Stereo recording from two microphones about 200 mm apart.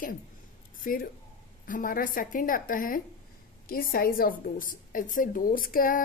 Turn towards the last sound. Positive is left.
turn(degrees=45)  # may be behind; listen again after turning